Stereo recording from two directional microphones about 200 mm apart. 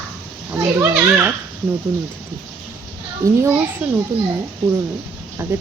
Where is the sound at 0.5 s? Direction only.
10° right (ahead or behind).